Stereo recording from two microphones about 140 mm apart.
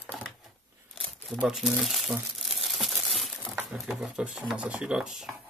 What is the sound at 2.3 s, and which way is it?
Crumpling, centre (ahead or behind).